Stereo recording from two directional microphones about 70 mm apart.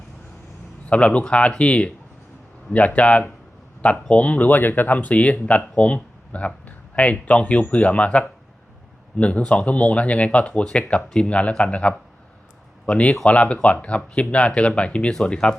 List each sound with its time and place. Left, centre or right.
0.9 s a man's voice: centre